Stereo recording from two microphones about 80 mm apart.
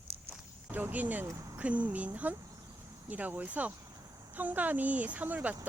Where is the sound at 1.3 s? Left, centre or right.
Right.